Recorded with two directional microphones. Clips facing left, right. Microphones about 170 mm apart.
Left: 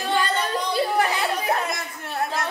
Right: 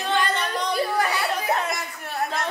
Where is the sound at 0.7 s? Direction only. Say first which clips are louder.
Left 2 dB; 25° left (ahead or behind).